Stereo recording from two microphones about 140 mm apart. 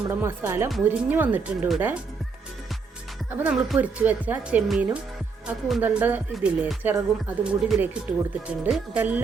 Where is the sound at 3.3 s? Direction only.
10° right (ahead or behind).